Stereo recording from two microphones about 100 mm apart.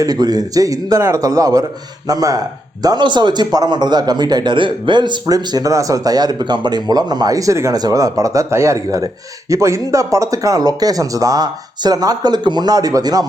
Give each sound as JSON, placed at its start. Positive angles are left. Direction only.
{"t": 0.0, "sound": "a man's voice", "side_deg": -40}